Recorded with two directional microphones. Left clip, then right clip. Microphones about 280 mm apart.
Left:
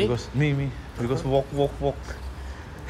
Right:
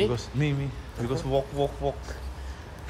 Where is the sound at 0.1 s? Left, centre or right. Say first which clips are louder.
Left 3 dB; centre.